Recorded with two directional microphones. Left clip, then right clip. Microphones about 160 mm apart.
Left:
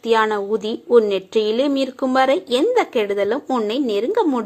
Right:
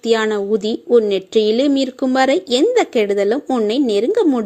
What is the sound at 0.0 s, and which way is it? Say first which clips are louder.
A woman's voice: right 1 dB; 45° right (ahead or behind).